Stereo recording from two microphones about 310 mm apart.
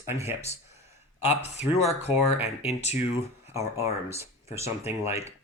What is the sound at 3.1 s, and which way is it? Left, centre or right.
Speech, centre.